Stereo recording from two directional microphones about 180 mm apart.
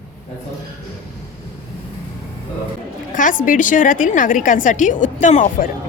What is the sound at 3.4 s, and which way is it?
A woman's voice, 45° left (ahead or behind).